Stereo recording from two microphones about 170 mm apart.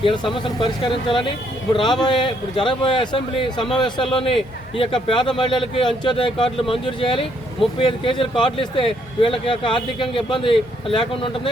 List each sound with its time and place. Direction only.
0.0 s a man's voice: 30° left (ahead or behind)